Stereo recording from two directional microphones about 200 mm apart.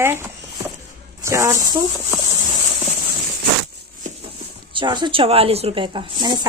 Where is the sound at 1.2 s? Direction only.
15° right (ahead or behind).